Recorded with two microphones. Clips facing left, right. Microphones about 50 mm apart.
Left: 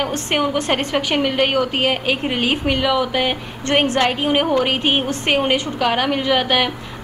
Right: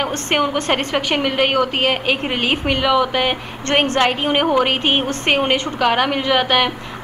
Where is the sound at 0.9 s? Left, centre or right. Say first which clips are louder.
Left 2 dB; centre.